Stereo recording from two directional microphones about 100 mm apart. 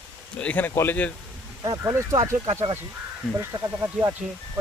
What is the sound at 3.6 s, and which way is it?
Speech, 30° right (ahead or behind).